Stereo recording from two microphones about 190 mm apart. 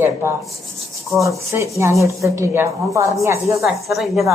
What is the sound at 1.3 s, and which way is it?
Speech, 15° right (ahead or behind).